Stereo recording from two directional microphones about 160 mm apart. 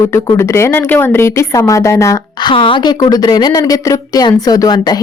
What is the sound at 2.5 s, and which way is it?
A woman's voice, 30° left (ahead or behind).